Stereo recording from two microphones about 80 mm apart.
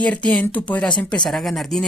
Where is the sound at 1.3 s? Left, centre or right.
Centre.